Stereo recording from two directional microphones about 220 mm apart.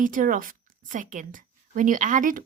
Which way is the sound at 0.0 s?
40° right (ahead or behind).